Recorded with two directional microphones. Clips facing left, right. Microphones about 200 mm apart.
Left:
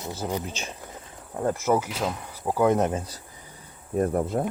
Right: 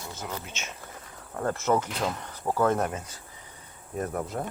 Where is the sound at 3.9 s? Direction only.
30° left (ahead or behind).